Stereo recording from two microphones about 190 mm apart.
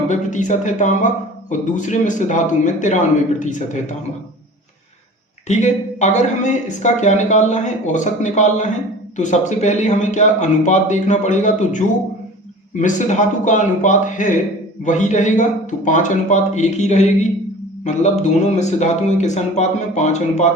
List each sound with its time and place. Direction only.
0.1 s speech: 40° left (ahead or behind)
5.5 s speech: 40° left (ahead or behind)